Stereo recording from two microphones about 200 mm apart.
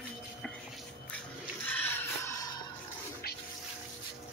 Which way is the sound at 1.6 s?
10° left (ahead or behind).